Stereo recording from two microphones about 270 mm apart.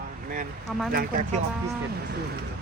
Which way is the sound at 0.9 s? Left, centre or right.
Right.